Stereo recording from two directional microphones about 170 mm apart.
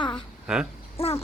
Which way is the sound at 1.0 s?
35° left (ahead or behind).